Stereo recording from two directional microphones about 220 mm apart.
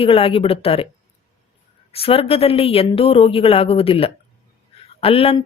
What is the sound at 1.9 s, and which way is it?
Speech, 25° left (ahead or behind).